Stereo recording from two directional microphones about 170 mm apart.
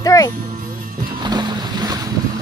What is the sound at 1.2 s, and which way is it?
Boat, 25° right (ahead or behind).